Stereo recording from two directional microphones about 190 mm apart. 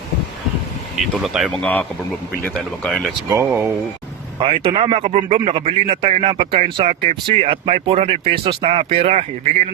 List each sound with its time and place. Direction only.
1.1 s speech: centre (ahead or behind)
3.2 s speech: 10° right (ahead or behind)
4.4 s speech: 30° right (ahead or behind)